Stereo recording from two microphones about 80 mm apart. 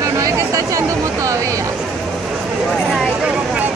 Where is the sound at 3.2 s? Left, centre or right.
Centre.